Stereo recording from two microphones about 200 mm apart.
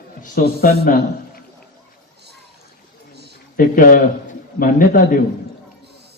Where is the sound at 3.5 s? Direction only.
45° left (ahead or behind).